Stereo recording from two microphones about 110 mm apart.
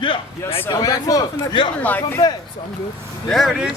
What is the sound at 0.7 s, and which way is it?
Speech, 35° left (ahead or behind).